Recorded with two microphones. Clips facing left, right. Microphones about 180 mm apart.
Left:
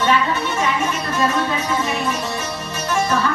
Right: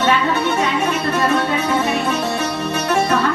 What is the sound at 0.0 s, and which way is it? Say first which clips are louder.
Music: right 2 dB; 65° right (ahead or behind).